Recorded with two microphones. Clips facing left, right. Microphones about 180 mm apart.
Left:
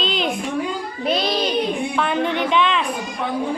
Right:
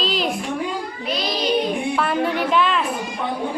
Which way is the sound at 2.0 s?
5° right (ahead or behind).